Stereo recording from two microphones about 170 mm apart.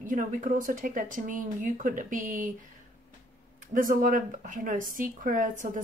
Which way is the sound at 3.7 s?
50° right (ahead or behind).